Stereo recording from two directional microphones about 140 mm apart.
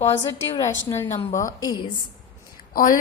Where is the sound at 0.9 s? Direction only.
20° left (ahead or behind).